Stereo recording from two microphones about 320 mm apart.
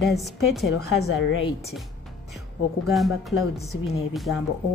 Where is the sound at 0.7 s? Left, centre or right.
Left.